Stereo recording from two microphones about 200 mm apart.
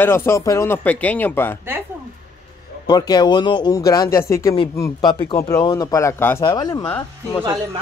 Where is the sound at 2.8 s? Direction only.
20° left (ahead or behind).